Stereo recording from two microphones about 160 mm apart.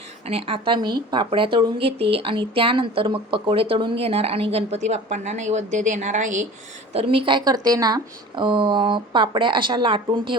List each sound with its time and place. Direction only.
0.3 s speech: 35° right (ahead or behind)
6.9 s speech: 35° right (ahead or behind)